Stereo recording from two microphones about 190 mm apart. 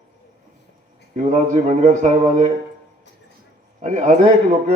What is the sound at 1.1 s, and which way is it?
A man's voice, 40° right (ahead or behind).